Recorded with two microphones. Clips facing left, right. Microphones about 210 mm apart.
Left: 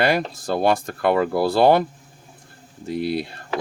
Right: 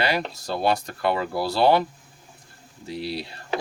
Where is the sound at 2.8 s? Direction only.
50° left (ahead or behind).